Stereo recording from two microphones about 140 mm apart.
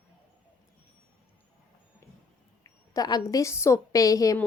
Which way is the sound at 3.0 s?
30° left (ahead or behind).